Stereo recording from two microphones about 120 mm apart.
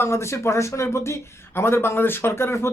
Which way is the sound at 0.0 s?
20° left (ahead or behind).